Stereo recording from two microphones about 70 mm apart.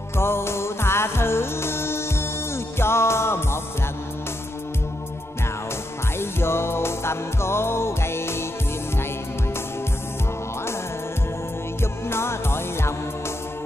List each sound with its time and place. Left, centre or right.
0.2 s music: left
6.1 s music: left
11.8 s music: left